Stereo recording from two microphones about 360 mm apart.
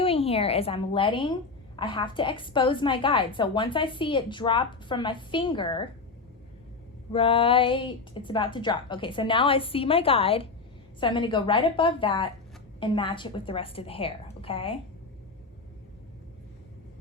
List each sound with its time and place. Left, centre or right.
0.0 s a woman's voice: centre
7.1 s a woman's voice: centre